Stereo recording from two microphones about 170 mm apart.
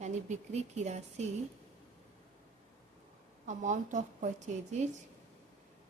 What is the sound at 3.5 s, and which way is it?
A woman's voice, 45° right (ahead or behind).